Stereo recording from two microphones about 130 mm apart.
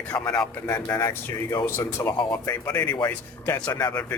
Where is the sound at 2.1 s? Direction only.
30° left (ahead or behind).